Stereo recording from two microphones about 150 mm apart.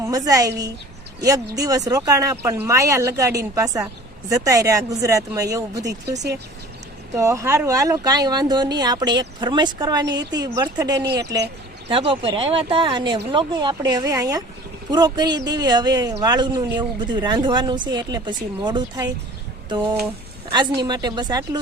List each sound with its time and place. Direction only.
0.0 s a woman's voice: 25° right (ahead or behind)
1.5 s speech: 25° right (ahead or behind)
7.2 s speech: 20° right (ahead or behind)
11.0 s speech: 90° right
11.9 s speech: 35° right (ahead or behind)